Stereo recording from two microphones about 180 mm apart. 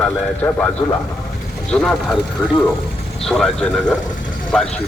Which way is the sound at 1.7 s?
5° left (ahead or behind).